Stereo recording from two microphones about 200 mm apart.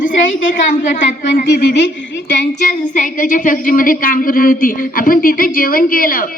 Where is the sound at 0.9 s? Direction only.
40° left (ahead or behind).